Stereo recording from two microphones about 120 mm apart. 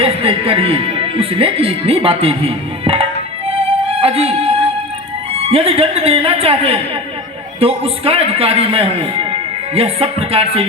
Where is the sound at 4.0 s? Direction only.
55° right (ahead or behind).